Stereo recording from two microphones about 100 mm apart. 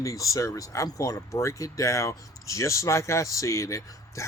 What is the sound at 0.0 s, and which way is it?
Speech, 35° left (ahead or behind).